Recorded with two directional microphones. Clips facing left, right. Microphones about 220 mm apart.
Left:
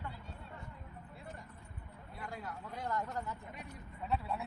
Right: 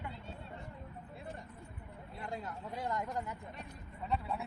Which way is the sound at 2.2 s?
25° right (ahead or behind).